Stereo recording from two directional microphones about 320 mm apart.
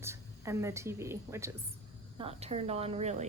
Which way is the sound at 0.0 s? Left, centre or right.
Centre.